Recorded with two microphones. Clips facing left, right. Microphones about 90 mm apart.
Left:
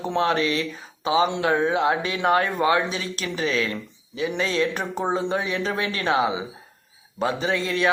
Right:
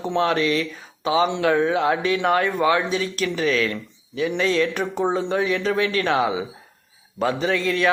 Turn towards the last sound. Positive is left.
turn(degrees=25)  # may be behind; listen again after turning